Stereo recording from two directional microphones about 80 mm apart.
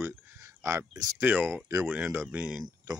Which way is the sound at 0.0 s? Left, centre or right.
Right.